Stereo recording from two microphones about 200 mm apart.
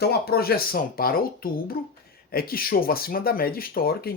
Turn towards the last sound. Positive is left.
turn(degrees=50)  # may be behind; listen again after turning